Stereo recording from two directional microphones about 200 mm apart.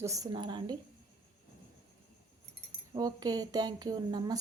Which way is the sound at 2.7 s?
20° right (ahead or behind).